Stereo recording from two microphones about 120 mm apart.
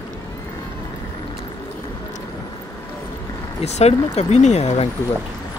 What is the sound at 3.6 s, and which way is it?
Speech, 60° left (ahead or behind).